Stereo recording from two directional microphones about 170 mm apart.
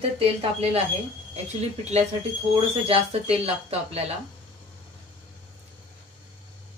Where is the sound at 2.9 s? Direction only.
35° right (ahead or behind).